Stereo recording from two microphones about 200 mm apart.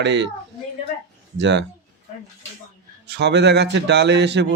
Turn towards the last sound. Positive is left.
turn(degrees=-60)  # may be behind; listen again after turning